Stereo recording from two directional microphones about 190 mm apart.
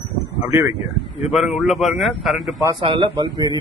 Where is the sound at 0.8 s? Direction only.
Centre (ahead or behind).